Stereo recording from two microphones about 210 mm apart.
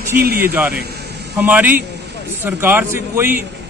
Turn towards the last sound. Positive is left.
turn(degrees=-10)  # may be behind; listen again after turning